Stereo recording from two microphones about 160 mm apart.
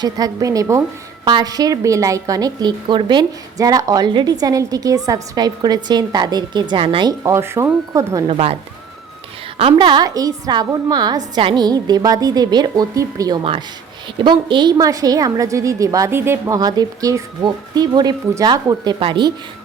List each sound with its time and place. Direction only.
0.0 s a woman's voice: 25° right (ahead or behind)
7.1 s speech: 20° right (ahead or behind)
8.3 s speech: 40° right (ahead or behind)
9.6 s a woman's voice: 35° right (ahead or behind)